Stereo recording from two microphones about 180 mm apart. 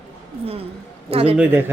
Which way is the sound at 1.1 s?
35° right (ahead or behind).